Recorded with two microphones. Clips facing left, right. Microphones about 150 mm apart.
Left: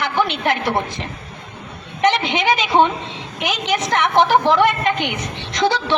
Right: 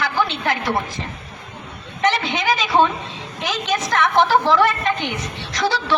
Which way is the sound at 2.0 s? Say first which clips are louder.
Left 3 dB; 20° left (ahead or behind).